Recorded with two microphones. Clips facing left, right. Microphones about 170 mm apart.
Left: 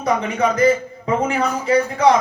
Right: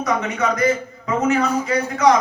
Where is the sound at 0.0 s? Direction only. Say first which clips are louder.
Left 2 dB; 30° left (ahead or behind).